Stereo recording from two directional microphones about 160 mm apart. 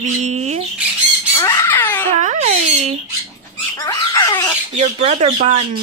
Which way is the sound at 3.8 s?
20° left (ahead or behind).